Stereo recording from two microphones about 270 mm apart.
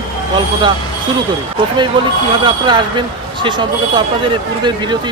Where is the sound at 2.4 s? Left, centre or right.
Centre.